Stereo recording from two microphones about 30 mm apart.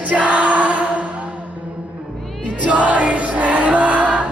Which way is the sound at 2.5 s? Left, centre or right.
Right.